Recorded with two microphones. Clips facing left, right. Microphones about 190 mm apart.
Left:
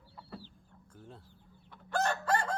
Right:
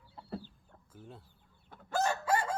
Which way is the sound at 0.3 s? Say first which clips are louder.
Right 6 dB; 50° right (ahead or behind).